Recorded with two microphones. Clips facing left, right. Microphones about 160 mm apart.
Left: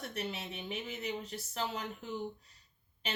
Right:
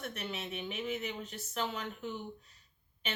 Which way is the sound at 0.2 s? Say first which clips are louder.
Left 4 dB; 35° left (ahead or behind).